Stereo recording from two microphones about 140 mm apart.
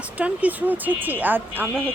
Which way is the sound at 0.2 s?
10° right (ahead or behind).